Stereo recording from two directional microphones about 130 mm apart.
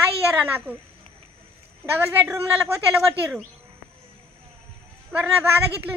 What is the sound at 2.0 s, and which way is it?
A woman's voice, 15° right (ahead or behind).